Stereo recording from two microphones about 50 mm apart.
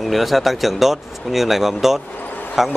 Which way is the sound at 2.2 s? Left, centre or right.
Left.